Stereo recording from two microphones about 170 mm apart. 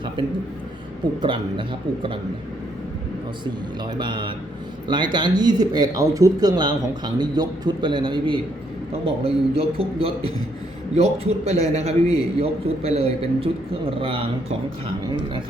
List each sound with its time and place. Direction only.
0.2 s speech: 30° right (ahead or behind)
3.9 s a man's voice: 30° right (ahead or behind)